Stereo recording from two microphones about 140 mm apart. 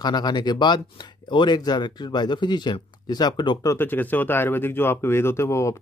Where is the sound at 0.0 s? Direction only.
30° left (ahead or behind).